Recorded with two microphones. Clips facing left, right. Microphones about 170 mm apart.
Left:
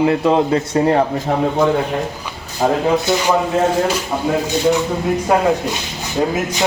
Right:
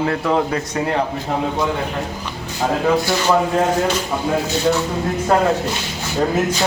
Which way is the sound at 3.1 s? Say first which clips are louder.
Left 3 dB; 20° left (ahead or behind).